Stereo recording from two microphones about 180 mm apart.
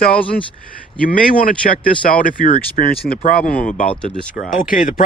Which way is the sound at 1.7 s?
50° left (ahead or behind).